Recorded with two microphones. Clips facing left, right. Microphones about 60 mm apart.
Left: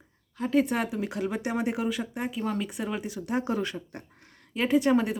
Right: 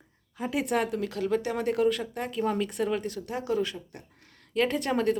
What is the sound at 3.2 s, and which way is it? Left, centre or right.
Speech, left.